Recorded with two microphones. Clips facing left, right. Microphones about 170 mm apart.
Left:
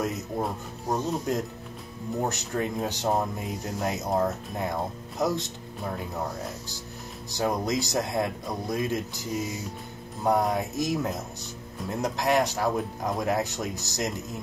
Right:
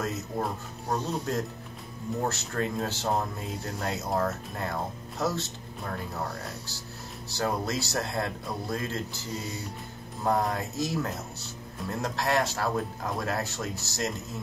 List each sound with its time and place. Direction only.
0.8 s speech: 15° left (ahead or behind)
7.2 s speech: 15° left (ahead or behind)